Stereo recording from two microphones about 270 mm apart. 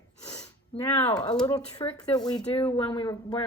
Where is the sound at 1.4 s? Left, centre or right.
Centre.